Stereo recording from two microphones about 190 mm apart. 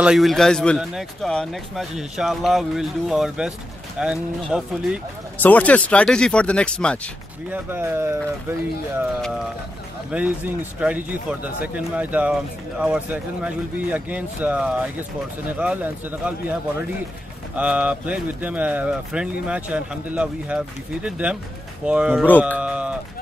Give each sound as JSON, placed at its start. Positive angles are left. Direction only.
{"t": 0.0, "sound": "a man's voice", "side_deg": 0}
{"t": 5.4, "sound": "a man's voice", "side_deg": 10}
{"t": 7.5, "sound": "a man's voice", "side_deg": -10}
{"t": 10.1, "sound": "a man's voice", "side_deg": -5}
{"t": 17.6, "sound": "a man's voice", "side_deg": -5}